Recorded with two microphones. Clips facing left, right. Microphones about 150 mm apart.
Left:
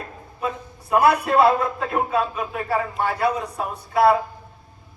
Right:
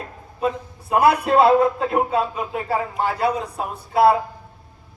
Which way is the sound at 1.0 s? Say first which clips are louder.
Right 2 dB; 25° right (ahead or behind).